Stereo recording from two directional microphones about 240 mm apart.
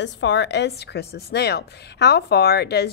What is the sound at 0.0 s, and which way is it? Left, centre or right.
A woman's voice, left.